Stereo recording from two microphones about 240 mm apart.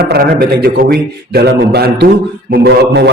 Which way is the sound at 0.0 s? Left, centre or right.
Right.